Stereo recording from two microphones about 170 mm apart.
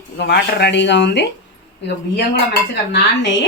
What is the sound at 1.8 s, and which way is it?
Speech, 80° left.